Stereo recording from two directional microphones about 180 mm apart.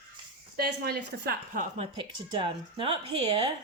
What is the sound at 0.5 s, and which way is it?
Speech, 60° right (ahead or behind).